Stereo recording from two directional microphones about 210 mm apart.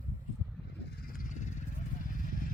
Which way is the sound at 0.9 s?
45° left (ahead or behind).